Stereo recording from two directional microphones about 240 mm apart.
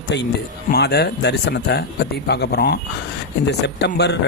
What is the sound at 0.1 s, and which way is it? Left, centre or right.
Speech, left.